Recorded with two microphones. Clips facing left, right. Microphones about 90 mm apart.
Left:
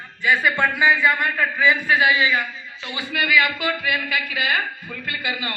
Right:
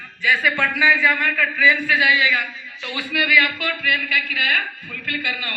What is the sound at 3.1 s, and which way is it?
Speech, centre (ahead or behind).